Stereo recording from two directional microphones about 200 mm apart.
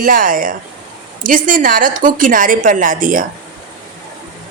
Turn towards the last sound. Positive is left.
turn(degrees=-40)  # may be behind; listen again after turning